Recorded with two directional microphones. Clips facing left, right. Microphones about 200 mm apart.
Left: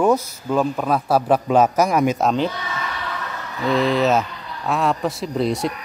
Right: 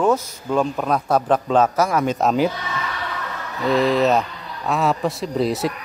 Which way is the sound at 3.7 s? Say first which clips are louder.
Right 1 dB; centre (ahead or behind).